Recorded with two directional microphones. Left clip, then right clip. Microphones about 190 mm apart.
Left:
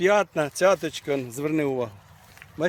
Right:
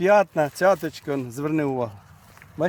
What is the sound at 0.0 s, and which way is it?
Speech, 35° right (ahead or behind).